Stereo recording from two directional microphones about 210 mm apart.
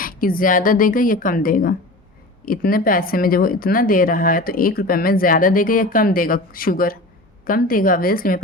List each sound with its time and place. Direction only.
0.0 s a woman's voice: 40° left (ahead or behind)